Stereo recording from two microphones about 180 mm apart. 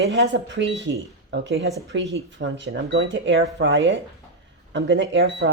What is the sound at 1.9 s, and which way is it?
Speech, 90° right.